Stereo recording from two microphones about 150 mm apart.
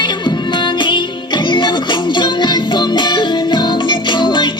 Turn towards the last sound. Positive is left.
turn(degrees=30)  # may be behind; listen again after turning